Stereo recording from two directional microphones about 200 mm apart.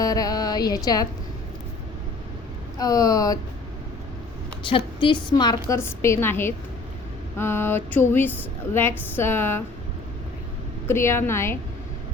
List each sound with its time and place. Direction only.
0.0 s a sound: 20° left (ahead or behind)
2.7 s a woman's voice: 20° left (ahead or behind)
4.6 s a woman's voice: 25° left (ahead or behind)
10.8 s a woman's voice: 10° left (ahead or behind)